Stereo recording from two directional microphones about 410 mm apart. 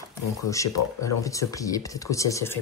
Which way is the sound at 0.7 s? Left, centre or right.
Left.